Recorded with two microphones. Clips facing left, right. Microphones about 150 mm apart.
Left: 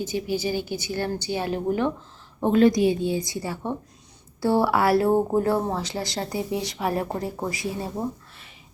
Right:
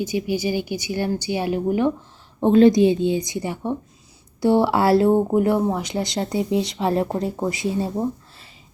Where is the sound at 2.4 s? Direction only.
25° right (ahead or behind).